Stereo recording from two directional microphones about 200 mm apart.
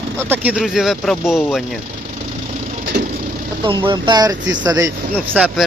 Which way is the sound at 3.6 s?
25° right (ahead or behind).